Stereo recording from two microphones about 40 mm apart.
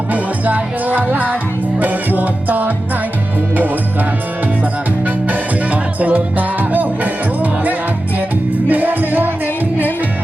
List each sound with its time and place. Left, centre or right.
0.1 s music: right
4.6 s music: right